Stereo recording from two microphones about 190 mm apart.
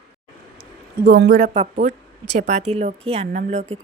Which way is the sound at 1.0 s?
65° right (ahead or behind).